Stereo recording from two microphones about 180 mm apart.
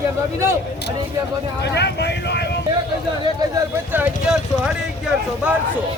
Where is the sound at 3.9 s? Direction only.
10° right (ahead or behind).